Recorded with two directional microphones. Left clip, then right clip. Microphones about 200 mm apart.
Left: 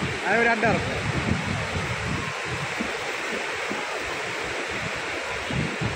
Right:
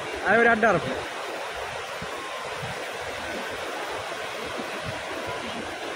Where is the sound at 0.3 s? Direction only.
30° right (ahead or behind).